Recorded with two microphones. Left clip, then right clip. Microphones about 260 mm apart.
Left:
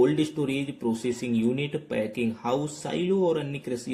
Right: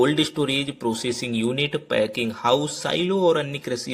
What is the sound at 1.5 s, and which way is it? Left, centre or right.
Speech, centre.